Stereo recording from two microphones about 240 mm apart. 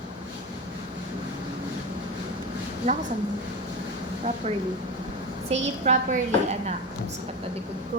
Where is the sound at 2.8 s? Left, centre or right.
Right.